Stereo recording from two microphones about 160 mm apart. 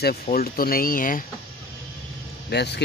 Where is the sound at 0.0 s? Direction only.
70° left (ahead or behind).